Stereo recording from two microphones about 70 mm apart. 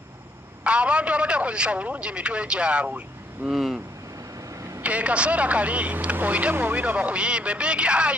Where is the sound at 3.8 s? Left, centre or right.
Right.